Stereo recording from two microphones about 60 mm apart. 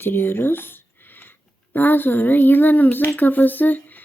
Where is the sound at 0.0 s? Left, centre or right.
Left.